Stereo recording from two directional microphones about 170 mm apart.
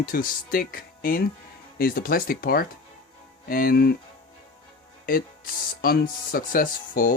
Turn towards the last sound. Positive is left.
turn(degrees=55)  # may be behind; listen again after turning